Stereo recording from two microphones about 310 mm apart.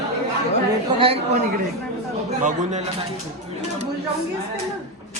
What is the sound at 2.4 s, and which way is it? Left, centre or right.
Speech, right.